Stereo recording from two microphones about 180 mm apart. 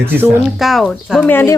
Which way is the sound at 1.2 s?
10° left (ahead or behind).